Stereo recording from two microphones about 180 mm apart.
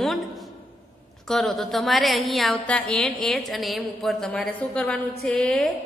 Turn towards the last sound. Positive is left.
turn(degrees=5)  # may be behind; listen again after turning